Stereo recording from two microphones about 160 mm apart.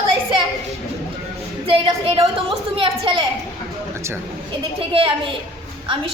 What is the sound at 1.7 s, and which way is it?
A woman's voice, 35° right (ahead or behind).